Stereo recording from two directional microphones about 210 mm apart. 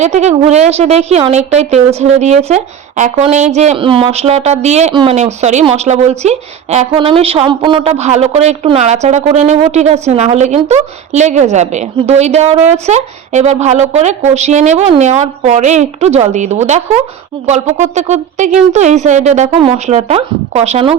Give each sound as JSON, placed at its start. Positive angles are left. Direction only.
{"t": 0.0, "sound": "a woman's voice", "side_deg": -30}